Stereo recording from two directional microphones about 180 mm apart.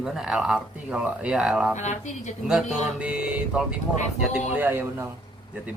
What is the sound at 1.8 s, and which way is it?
Speech, 40° left (ahead or behind).